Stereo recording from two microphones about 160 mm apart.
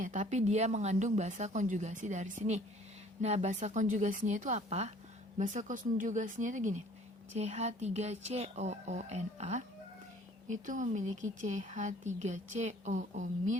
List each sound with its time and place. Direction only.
0.0 s a woman's voice: 50° right (ahead or behind)